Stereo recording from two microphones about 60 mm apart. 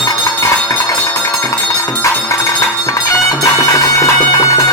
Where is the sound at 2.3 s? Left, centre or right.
Left.